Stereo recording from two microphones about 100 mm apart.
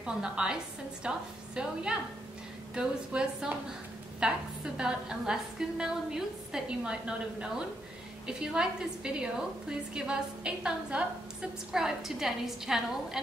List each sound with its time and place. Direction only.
0.0 s a woman's voice: 10° right (ahead or behind)